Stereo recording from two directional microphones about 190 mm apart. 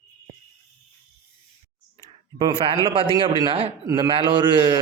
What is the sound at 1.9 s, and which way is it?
Clicking, 25° right (ahead or behind).